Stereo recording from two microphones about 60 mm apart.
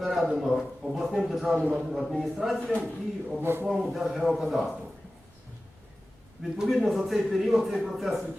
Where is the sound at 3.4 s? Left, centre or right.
Right.